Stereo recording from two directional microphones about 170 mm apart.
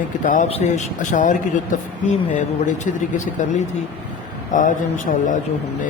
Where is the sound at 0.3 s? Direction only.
50° left (ahead or behind).